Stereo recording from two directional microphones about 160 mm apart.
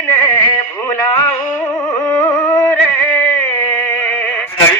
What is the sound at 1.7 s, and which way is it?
Music, 20° left (ahead or behind).